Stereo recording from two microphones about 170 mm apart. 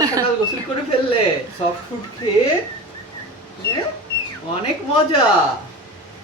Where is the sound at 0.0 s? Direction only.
20° right (ahead or behind).